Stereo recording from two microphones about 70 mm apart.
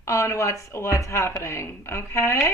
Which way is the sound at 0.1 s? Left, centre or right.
Left.